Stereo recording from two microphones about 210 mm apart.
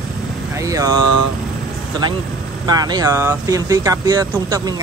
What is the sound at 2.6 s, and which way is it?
Speech, 20° right (ahead or behind).